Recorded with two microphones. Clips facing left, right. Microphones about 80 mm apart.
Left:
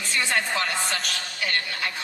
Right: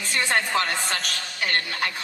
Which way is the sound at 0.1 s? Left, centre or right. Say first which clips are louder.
Right 2 dB; right.